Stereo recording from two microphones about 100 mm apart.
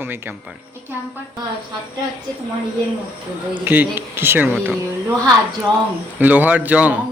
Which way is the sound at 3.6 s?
20° right (ahead or behind).